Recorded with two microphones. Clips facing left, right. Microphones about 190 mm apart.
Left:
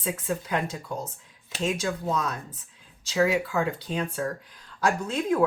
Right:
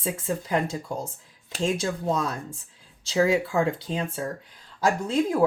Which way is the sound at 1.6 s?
30° right (ahead or behind).